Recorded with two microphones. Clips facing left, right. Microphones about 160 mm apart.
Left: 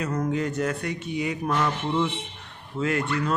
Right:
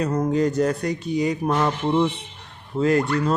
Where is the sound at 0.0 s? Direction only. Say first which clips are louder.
Right 5 dB; 35° right (ahead or behind).